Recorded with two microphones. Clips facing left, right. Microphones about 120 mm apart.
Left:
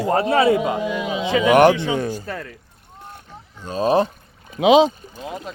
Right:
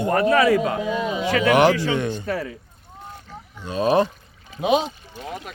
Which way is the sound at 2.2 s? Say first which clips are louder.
Right 4 dB; 5° right (ahead or behind).